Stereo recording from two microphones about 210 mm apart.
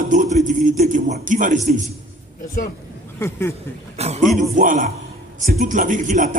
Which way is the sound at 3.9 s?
30° right (ahead or behind).